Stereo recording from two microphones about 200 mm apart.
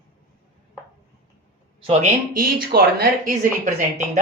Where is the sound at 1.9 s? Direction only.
40° right (ahead or behind).